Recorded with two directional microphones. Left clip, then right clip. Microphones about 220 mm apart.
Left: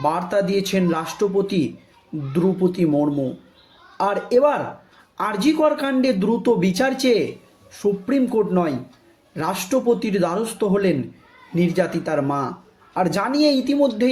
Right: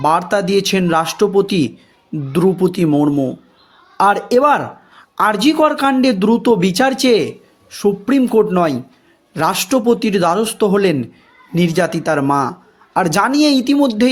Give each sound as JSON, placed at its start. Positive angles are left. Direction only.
{"t": 0.0, "sound": "speech", "side_deg": -45}